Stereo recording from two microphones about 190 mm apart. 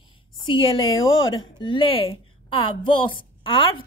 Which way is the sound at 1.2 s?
90° left.